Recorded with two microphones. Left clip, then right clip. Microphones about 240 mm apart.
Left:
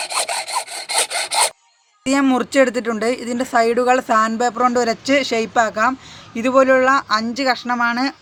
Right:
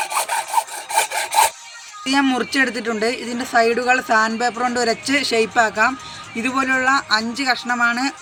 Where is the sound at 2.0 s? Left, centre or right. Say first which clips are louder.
Left 1 dB; left.